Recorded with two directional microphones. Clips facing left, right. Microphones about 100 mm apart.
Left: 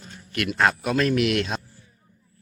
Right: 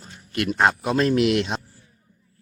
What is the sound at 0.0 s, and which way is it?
A man's voice, 25° right (ahead or behind).